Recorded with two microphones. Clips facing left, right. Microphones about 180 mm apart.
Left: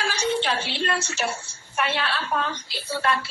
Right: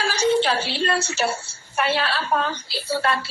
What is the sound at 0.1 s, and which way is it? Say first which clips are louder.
A woman's voice: right 7 dB; 35° right (ahead or behind).